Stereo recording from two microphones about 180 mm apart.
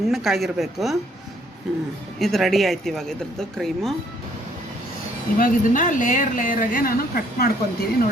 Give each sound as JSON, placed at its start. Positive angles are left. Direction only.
{"t": 0.1, "sound": "speech", "side_deg": 0}
{"t": 2.1, "sound": "speech", "side_deg": 0}
{"t": 5.4, "sound": "speech", "side_deg": 45}